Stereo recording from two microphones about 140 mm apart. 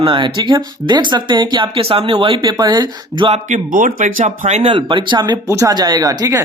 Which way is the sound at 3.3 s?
65° right (ahead or behind).